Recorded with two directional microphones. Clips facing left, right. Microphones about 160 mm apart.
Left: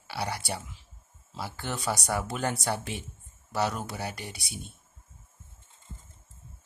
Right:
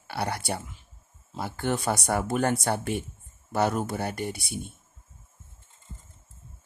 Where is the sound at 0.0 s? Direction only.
55° right (ahead or behind).